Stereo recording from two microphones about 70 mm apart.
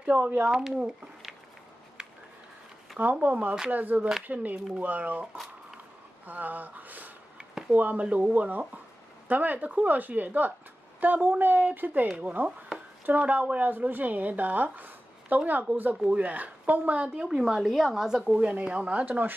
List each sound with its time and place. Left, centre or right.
0.0 s speech: centre
3.0 s speech: right
6.2 s speech: right
17.6 s speech: centre; by 19.3 s right